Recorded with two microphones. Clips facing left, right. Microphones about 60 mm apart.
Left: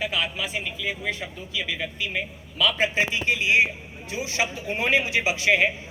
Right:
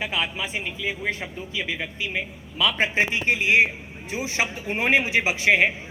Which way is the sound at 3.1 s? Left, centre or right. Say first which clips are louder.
Right 1 dB; right.